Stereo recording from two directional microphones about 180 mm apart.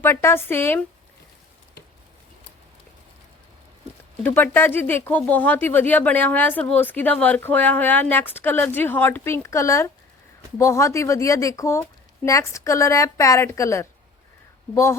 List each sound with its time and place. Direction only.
0.0 s speech: 15° left (ahead or behind)
4.2 s speech: 10° left (ahead or behind)